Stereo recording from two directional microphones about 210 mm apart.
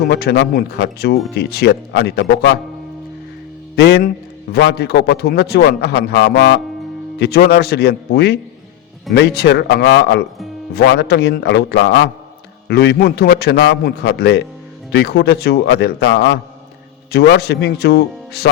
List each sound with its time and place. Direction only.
0.0 s a man's voice: 50° left (ahead or behind)
3.8 s a man's voice: 50° left (ahead or behind)